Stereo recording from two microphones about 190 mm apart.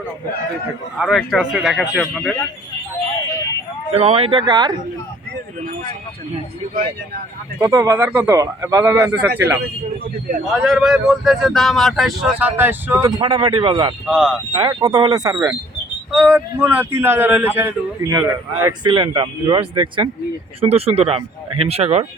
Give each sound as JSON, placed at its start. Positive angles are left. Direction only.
{"t": 0.9, "sound": "speech", "side_deg": 0}
{"t": 3.9, "sound": "speech", "side_deg": -30}
{"t": 7.6, "sound": "a man's voice", "side_deg": -15}
{"t": 10.4, "sound": "speech", "side_deg": 0}
{"t": 14.1, "sound": "speech", "side_deg": -5}
{"t": 14.5, "sound": "a man's voice", "side_deg": -20}